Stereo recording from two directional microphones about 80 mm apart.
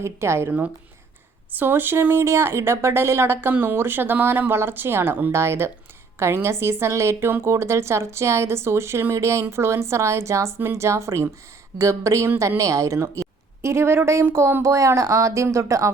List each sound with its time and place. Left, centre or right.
0.0 s speech: right
1.5 s speech: right